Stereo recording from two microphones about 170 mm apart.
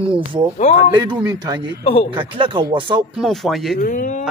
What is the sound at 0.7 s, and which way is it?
Speech, 40° left (ahead or behind).